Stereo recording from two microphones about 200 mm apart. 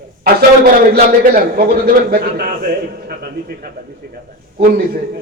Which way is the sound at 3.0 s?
50° right (ahead or behind).